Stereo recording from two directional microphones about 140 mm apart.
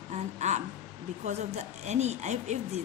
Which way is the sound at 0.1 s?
55° right (ahead or behind).